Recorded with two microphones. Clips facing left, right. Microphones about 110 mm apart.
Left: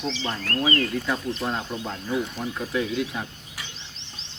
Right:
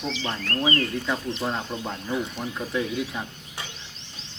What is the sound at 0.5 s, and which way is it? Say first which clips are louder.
Speech: left 1 dB; 30° right (ahead or behind).